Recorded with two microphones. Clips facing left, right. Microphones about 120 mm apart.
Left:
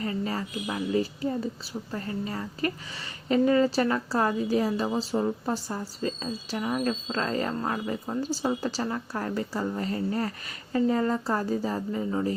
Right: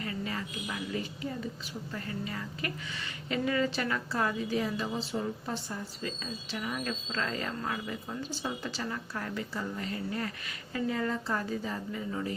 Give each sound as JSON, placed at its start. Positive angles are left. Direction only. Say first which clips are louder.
{"t": 0.0, "sound": "a woman's voice", "louder": "left 6 dB", "side_deg": 35}